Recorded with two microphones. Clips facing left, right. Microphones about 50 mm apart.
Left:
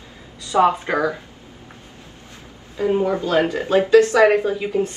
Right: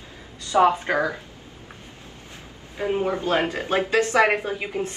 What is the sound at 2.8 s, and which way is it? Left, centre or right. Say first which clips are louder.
A woman's voice: left 5 dB; right.